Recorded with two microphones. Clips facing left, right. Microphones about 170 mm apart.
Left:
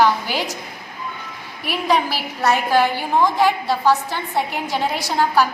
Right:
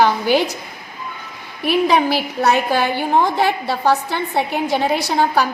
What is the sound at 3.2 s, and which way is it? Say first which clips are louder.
A woman's voice: even; 65° right (ahead or behind).